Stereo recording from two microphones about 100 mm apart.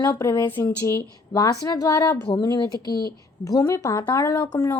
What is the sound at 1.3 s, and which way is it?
Speech, 40° left (ahead or behind).